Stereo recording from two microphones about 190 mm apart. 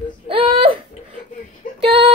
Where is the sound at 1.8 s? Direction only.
30° right (ahead or behind).